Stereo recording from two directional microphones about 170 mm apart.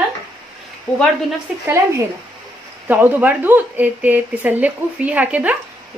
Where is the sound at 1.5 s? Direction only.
5° right (ahead or behind).